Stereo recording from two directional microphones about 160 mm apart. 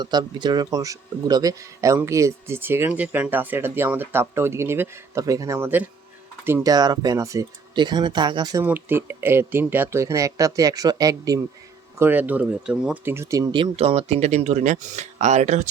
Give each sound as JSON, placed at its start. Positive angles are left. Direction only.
{"t": 0.0, "sound": "speech", "side_deg": -25}
{"t": 8.6, "sound": "speech", "side_deg": -10}
{"t": 11.9, "sound": "speech", "side_deg": -10}
{"t": 13.6, "sound": "speech", "side_deg": -40}